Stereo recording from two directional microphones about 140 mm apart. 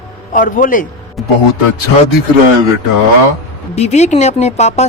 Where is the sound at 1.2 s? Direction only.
Centre (ahead or behind).